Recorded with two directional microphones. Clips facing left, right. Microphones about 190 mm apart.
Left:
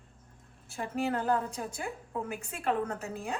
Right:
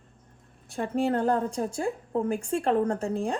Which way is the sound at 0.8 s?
30° right (ahead or behind).